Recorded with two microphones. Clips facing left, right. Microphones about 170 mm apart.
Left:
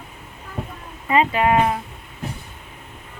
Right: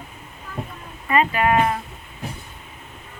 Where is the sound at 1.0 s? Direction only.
20° left (ahead or behind).